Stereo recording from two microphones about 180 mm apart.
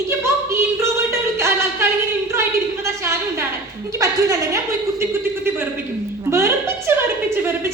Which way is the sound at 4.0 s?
15° right (ahead or behind).